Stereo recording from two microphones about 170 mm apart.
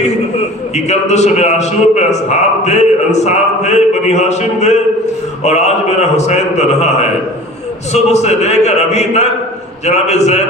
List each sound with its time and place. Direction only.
0.9 s a man's voice: 40° left (ahead or behind)